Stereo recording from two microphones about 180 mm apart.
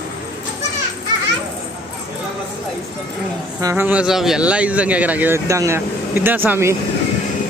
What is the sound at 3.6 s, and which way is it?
Speech, 10° right (ahead or behind).